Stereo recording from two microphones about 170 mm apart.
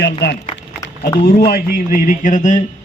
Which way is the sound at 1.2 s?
70° left (ahead or behind).